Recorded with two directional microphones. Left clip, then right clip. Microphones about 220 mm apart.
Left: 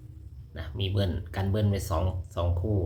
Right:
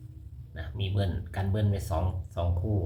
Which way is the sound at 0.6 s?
10° left (ahead or behind).